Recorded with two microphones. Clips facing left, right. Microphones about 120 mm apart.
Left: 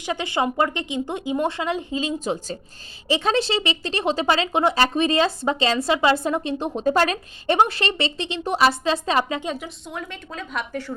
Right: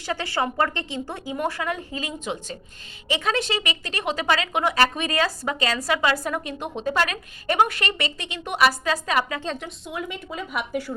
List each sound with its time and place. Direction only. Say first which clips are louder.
0.0 s speech: left 2 dB; 20° left (ahead or behind)
2.1 s speech: left 5 dB; 35° left (ahead or behind)
9.4 s a woman's voice: left 2 dB; 10° left (ahead or behind)
9.6 s a woman's voice: right 1 dB; centre (ahead or behind)